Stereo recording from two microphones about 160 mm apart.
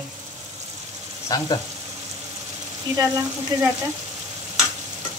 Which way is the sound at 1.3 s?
20° left (ahead or behind).